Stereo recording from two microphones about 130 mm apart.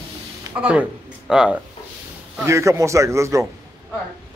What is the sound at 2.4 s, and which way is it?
Speech, 20° right (ahead or behind).